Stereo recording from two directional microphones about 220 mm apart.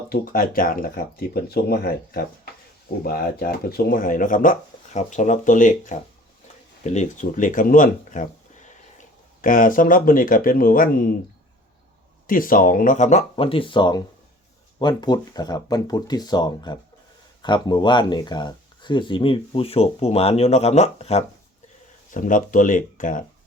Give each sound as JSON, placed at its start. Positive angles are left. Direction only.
{"t": 0.1, "sound": "speech", "side_deg": 40}
{"t": 12.3, "sound": "speech", "side_deg": 40}